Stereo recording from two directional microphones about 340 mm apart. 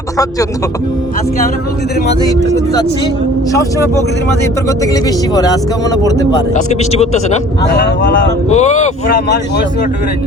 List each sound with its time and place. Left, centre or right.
3.5 s speech: centre; by 9.6 s left